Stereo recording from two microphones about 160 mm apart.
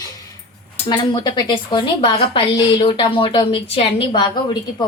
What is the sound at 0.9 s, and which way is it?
Speech, 30° left (ahead or behind).